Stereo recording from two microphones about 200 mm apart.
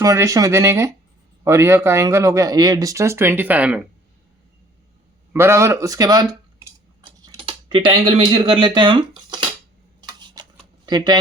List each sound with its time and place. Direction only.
0.0 s speech: 15° right (ahead or behind)
5.3 s speech: 10° right (ahead or behind)
7.3 s speech: 25° right (ahead or behind)
10.0 s a sound: 20° right (ahead or behind)